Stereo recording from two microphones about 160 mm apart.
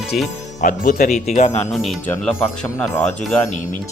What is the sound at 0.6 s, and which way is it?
Speech, 55° left (ahead or behind).